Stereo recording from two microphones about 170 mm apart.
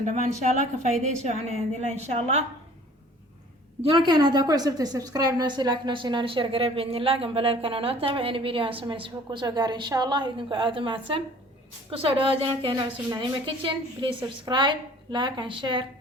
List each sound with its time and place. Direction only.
0.0 s a woman's voice: 45° right (ahead or behind)
3.9 s a woman's voice: 25° right (ahead or behind)